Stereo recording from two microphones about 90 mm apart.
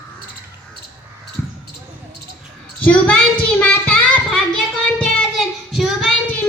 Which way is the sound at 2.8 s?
15° left (ahead or behind).